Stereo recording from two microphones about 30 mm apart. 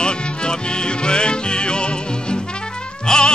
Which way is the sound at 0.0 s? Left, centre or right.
Left.